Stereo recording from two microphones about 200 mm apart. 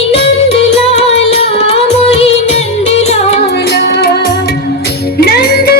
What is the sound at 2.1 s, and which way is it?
Music, 30° left (ahead or behind).